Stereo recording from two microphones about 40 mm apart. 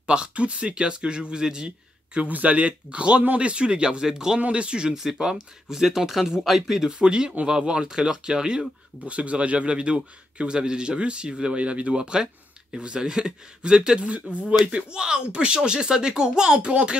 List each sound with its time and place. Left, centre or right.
0.0 s a man's voice: right
2.2 s a man's voice: right; by 4.4 s centre
4.4 s a man's voice: right
4.9 s speech: centre
6.9 s a man's voice: right
9.0 s a man's voice: right